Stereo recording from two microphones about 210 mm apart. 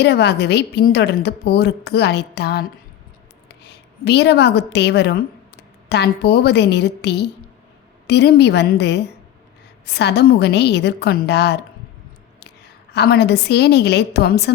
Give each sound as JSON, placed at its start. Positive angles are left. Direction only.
{"t": 0.0, "sound": "a woman's voice", "side_deg": 55}
{"t": 4.0, "sound": "a woman's voice", "side_deg": 50}
{"t": 12.9, "sound": "a woman's voice", "side_deg": 50}